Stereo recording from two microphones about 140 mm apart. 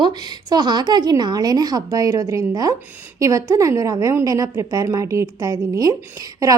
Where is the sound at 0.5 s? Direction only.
30° right (ahead or behind).